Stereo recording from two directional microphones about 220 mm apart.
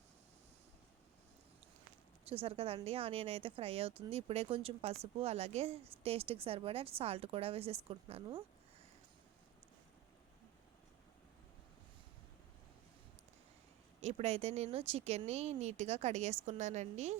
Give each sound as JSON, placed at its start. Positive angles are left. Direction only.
{"t": 2.3, "sound": "speech", "side_deg": -25}
{"t": 14.0, "sound": "speech", "side_deg": -30}